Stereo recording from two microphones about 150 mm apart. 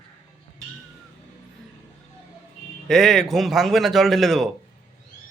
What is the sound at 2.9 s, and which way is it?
A man's voice, centre (ahead or behind).